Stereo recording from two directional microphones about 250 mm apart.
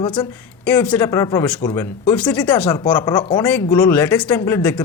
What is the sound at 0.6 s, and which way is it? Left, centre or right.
Speech, centre.